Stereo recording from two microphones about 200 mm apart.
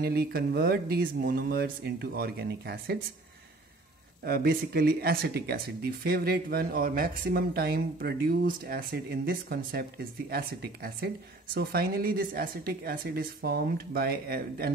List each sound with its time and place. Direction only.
0.0 s speech: 50° right (ahead or behind)
4.2 s speech: 50° right (ahead or behind)